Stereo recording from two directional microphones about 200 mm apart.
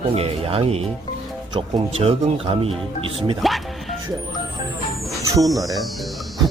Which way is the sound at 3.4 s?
Centre (ahead or behind).